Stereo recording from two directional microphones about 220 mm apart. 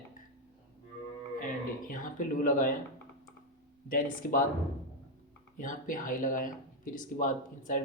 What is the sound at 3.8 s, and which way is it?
Speech, 40° left (ahead or behind).